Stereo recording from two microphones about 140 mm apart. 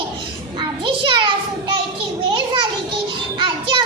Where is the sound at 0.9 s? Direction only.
35° right (ahead or behind).